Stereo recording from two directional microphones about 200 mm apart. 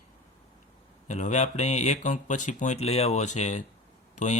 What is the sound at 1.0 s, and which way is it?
Speech, 35° left (ahead or behind).